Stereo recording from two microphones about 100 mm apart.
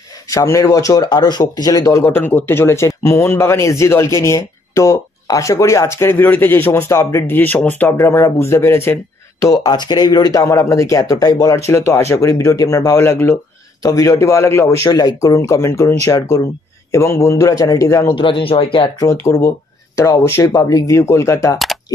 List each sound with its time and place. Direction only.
0.3 s speech: 35° left (ahead or behind)
2.0 s speech: 20° left (ahead or behind)
9.5 s speech: 40° left (ahead or behind)
10.4 s speech: 30° left (ahead or behind)
13.8 s speech: 35° left (ahead or behind)
14.9 s speech: 40° left (ahead or behind)
18.1 s speech: 60° left (ahead or behind)
19.2 s speech: 35° left (ahead or behind)